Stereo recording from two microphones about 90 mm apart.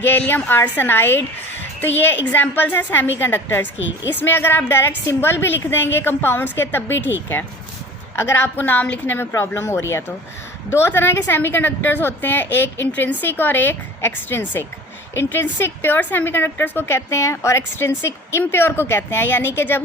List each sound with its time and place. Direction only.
0.0 s a woman's voice: 20° left (ahead or behind)